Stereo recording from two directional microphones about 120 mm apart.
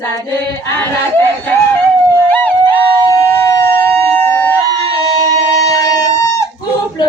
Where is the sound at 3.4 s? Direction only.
25° left (ahead or behind).